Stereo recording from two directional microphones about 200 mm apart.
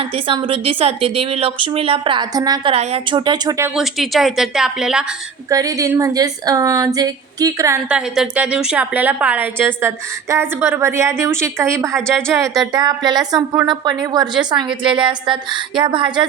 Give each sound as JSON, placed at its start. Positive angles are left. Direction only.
{"t": 0.0, "sound": "a woman's voice", "side_deg": -25}
{"t": 3.8, "sound": "speech", "side_deg": 0}
{"t": 5.5, "sound": "a woman's voice", "side_deg": -15}
{"t": 7.9, "sound": "a woman's voice", "side_deg": -5}